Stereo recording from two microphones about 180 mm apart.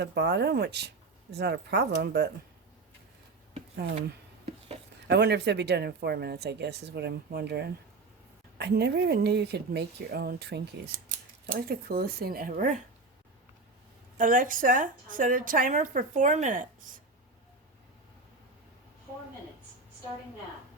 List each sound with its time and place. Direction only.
0.0 s speech: 65° right (ahead or behind)
5.0 s speech: 70° right (ahead or behind); by 12.8 s 45° right (ahead or behind)
14.2 s a woman's voice: 50° right (ahead or behind)